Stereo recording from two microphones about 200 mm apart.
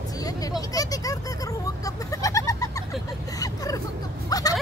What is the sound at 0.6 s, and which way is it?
Goat, 20° left (ahead or behind).